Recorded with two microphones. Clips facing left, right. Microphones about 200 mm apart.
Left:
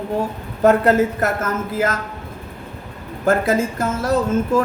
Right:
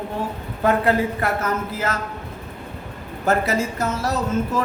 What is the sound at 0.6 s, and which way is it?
A man's voice, 45° left (ahead or behind).